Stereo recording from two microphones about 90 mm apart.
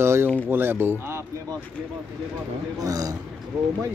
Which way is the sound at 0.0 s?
25° right (ahead or behind).